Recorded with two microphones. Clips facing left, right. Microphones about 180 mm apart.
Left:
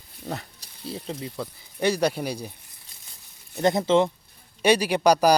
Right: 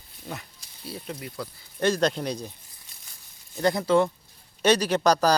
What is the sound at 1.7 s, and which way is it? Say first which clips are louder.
Speech: even; 10° left (ahead or behind).